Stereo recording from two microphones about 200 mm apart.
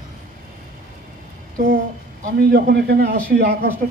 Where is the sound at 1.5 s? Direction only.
45° right (ahead or behind).